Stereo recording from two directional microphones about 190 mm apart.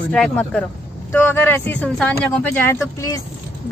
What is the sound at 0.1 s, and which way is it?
A woman's voice, 5° left (ahead or behind).